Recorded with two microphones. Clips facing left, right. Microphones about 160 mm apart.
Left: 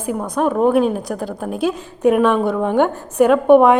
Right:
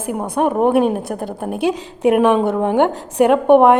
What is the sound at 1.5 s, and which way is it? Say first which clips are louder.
Speech: right 2 dB; 70° right (ahead or behind).